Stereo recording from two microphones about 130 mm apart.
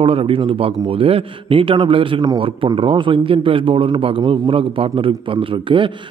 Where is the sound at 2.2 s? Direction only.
30° right (ahead or behind).